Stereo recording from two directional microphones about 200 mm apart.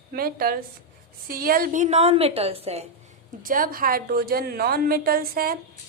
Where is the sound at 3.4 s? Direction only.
45° right (ahead or behind).